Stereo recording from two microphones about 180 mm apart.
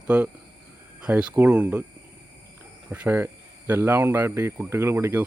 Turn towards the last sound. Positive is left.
turn(degrees=-15)  # may be behind; listen again after turning